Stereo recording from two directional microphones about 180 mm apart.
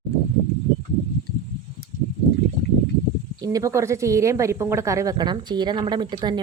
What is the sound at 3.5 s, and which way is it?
A woman's voice, 15° right (ahead or behind).